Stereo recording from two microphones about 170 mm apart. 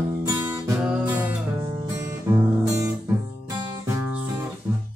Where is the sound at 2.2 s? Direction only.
15° right (ahead or behind).